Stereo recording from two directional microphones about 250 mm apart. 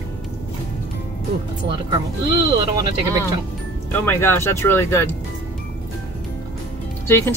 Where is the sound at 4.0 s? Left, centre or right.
Centre.